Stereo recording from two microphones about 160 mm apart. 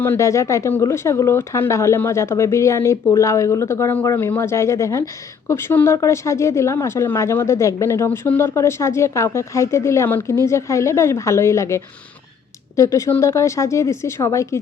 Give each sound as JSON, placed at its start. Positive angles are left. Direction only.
{"t": 0.0, "sound": "speech", "side_deg": 15}